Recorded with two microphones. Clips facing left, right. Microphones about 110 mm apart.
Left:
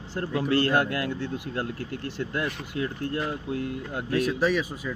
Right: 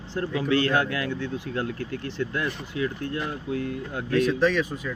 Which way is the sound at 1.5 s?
25° left (ahead or behind).